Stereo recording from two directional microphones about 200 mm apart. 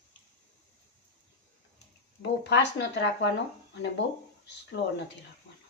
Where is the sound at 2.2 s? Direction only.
60° left (ahead or behind).